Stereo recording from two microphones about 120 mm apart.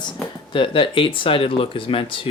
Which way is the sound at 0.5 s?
45° left (ahead or behind).